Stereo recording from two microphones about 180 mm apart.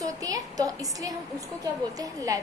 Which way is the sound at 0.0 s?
20° right (ahead or behind).